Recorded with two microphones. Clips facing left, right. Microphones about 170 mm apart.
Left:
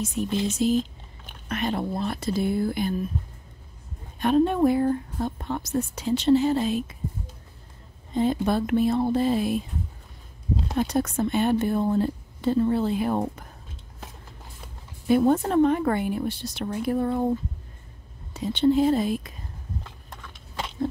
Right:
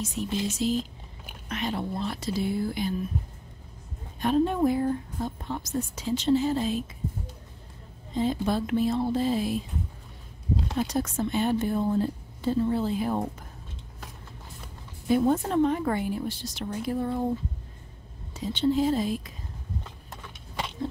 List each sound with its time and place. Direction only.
0.0 s speech: 55° left (ahead or behind)
4.2 s speech: 65° left (ahead or behind)
8.1 s speech: 55° left (ahead or behind)
10.8 s speech: 60° left (ahead or behind)
15.0 s speech: 60° left (ahead or behind)
18.3 s speech: 60° left (ahead or behind)